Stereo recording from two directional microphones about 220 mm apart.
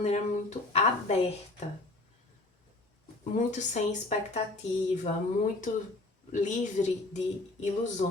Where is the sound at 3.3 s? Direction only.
35° left (ahead or behind).